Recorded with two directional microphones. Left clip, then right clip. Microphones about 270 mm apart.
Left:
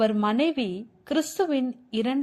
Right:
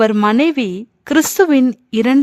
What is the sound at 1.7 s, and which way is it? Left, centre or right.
Speech, right.